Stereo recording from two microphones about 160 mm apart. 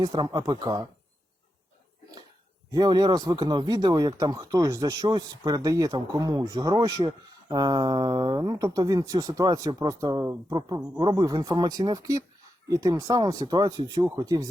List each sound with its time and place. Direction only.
0.0 s speech: 25° right (ahead or behind)
2.7 s speech: 25° right (ahead or behind)